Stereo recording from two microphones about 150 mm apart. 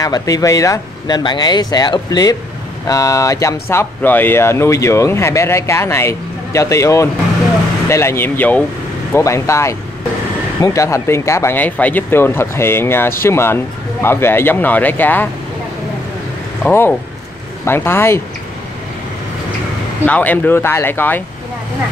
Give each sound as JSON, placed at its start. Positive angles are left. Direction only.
{"t": 0.0, "sound": "speech", "side_deg": 25}
{"t": 17.6, "sound": "speech", "side_deg": 15}
{"t": 20.1, "sound": "speech", "side_deg": 10}